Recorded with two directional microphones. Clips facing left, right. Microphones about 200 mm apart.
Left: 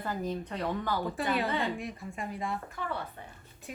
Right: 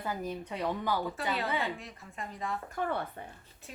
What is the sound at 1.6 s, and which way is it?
Speech, 15° left (ahead or behind).